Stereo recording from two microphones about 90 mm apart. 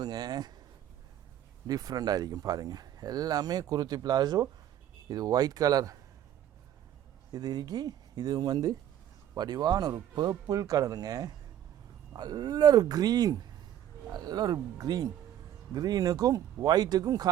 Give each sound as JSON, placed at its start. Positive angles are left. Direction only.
{"t": 0.0, "sound": "speech", "side_deg": -45}
{"t": 1.6, "sound": "speech", "side_deg": -45}
{"t": 7.3, "sound": "speech", "side_deg": -50}